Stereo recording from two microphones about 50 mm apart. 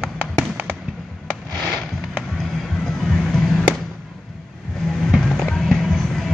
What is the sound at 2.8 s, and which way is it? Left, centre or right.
Music, centre.